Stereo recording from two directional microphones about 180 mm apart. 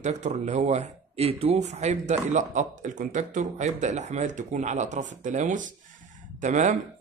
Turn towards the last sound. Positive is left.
turn(degrees=-45)  # may be behind; listen again after turning